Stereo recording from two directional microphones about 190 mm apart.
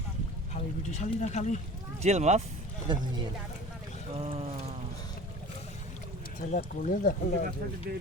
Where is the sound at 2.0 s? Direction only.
35° right (ahead or behind).